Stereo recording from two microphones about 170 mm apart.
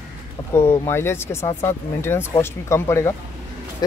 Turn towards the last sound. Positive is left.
turn(degrees=15)  # may be behind; listen again after turning